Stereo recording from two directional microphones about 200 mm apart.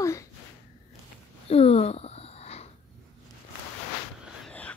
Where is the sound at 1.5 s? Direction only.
30° left (ahead or behind).